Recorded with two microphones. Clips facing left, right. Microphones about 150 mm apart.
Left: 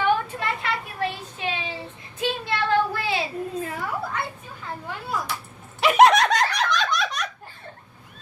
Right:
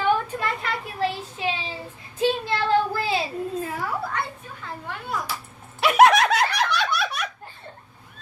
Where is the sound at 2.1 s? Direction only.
30° right (ahead or behind).